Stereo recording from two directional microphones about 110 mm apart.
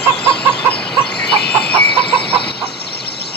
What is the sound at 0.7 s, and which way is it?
Chicken, 10° left (ahead or behind).